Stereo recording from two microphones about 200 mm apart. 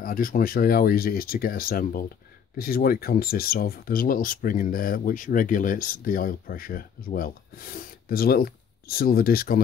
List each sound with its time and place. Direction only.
0.0 s speech: 45° left (ahead or behind)